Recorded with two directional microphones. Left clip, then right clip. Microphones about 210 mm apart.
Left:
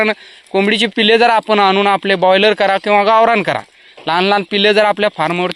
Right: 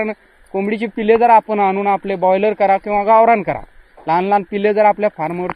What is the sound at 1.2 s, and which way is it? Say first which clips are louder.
Speech: left 1 dB; 40° left (ahead or behind).